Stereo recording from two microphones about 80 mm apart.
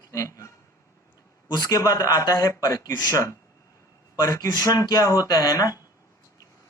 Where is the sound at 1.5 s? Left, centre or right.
Left.